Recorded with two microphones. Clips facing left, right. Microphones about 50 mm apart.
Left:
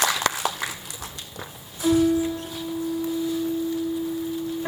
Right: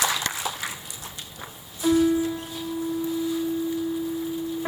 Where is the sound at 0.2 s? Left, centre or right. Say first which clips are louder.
Left 5 dB; left.